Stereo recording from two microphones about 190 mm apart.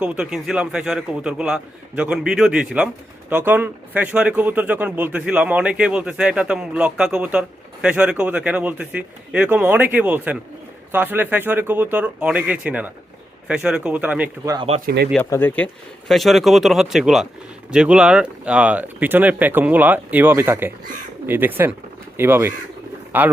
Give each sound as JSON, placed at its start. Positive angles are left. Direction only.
{"t": 0.0, "sound": "a man's voice", "side_deg": -5}
{"t": 14.5, "sound": "speech", "side_deg": -25}
{"t": 14.8, "sound": "speech", "side_deg": -55}
{"t": 15.2, "sound": "a man's voice", "side_deg": 10}